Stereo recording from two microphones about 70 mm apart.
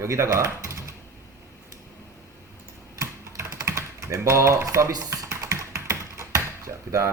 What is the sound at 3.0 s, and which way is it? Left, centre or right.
Typing, right.